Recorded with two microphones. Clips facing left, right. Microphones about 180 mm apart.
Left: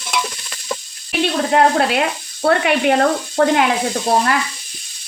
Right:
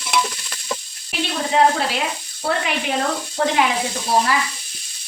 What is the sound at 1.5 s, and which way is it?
Speech, 65° left (ahead or behind).